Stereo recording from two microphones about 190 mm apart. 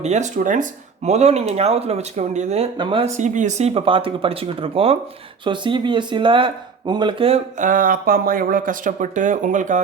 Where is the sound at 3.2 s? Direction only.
40° right (ahead or behind).